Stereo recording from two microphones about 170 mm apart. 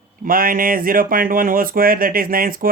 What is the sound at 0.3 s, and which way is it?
Speech, 55° right (ahead or behind).